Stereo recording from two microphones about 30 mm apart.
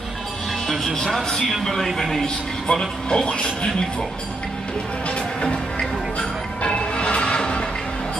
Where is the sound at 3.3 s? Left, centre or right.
Left.